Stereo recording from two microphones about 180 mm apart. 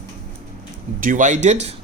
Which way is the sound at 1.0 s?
45° right (ahead or behind).